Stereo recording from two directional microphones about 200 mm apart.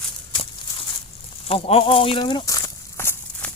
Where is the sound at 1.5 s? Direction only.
30° left (ahead or behind).